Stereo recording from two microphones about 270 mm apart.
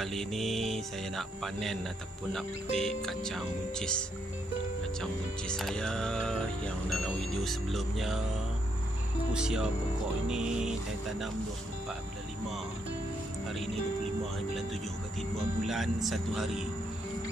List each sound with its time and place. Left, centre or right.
0.0 s speech: centre
5.0 s speech: centre
9.3 s speech: centre
15.6 s speech: centre